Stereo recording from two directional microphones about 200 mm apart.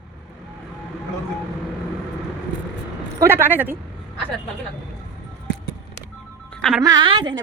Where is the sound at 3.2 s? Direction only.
10° right (ahead or behind).